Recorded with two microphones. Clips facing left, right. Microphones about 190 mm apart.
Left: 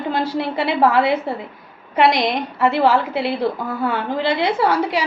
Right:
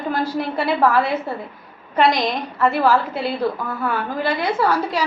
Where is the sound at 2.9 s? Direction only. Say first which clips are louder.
Left 1 dB; 75° left (ahead or behind).